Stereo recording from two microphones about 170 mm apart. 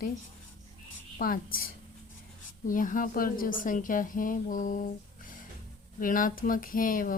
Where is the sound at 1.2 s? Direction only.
60° left (ahead or behind).